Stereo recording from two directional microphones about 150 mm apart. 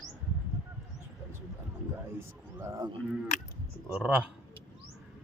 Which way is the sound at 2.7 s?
25° right (ahead or behind).